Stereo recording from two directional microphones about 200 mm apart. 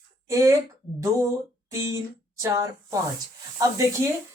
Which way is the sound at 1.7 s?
15° right (ahead or behind).